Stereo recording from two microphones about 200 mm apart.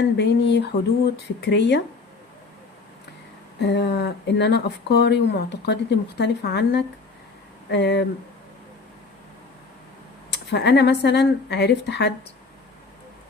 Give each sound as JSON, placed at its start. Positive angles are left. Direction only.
{"t": 0.2, "sound": "speech", "side_deg": 60}
{"t": 3.6, "sound": "speech", "side_deg": 55}
{"t": 10.3, "sound": "speech", "side_deg": 55}